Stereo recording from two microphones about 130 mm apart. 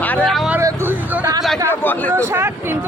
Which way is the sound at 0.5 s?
15° right (ahead or behind).